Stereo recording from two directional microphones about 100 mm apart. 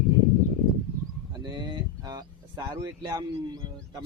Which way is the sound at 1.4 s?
45° right (ahead or behind).